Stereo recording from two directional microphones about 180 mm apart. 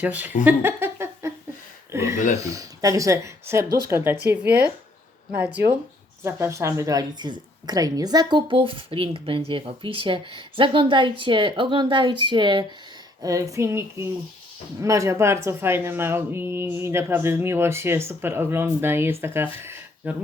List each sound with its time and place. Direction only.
0.0 s speech: 10° right (ahead or behind)
0.4 s a sound: 10° right (ahead or behind)
1.9 s a woman's voice: 15° right (ahead or behind)